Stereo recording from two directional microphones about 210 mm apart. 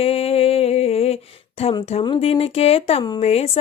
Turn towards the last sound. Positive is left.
turn(degrees=30)  # may be behind; listen again after turning